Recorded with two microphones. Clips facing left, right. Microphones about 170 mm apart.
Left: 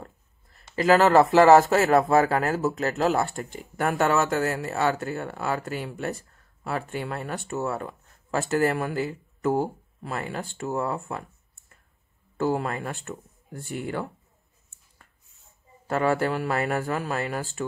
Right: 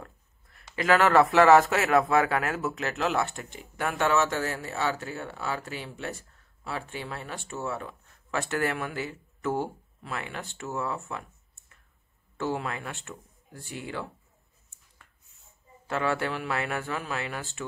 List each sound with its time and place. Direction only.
0.0 s a sound: 30° left (ahead or behind)
1.3 s speech: 35° left (ahead or behind)
4.6 s speech: 55° left (ahead or behind)
12.4 s speech: 40° left (ahead or behind)
15.9 s speech: 40° left (ahead or behind)